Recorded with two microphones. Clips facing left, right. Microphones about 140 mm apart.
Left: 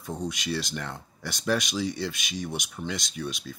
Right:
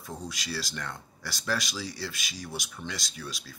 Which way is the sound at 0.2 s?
20° left (ahead or behind).